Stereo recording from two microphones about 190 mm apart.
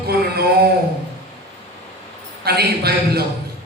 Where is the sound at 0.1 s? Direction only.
55° right (ahead or behind).